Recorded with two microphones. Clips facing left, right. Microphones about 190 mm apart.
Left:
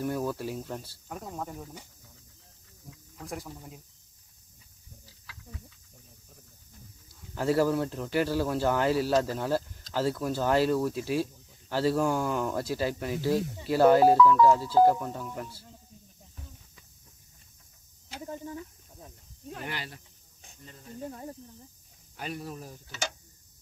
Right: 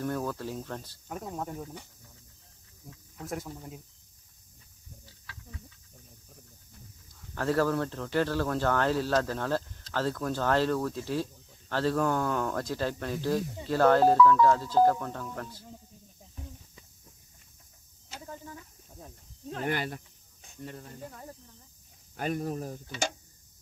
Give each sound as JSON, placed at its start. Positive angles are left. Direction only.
{"t": 0.0, "sound": "speech", "side_deg": 10}
{"t": 3.2, "sound": "speech", "side_deg": 0}
{"t": 7.3, "sound": "speech", "side_deg": 10}
{"t": 18.2, "sound": "speech", "side_deg": 20}
{"t": 19.6, "sound": "speech", "side_deg": -50}
{"t": 21.1, "sound": "speech", "side_deg": 25}
{"t": 22.1, "sound": "speech", "side_deg": -50}